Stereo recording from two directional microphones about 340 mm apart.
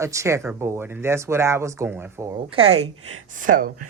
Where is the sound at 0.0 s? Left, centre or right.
Centre.